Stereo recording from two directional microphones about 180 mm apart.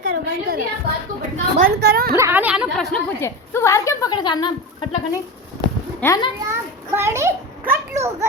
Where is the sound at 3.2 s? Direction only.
15° left (ahead or behind).